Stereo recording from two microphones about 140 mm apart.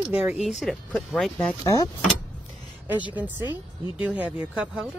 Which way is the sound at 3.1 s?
10° right (ahead or behind).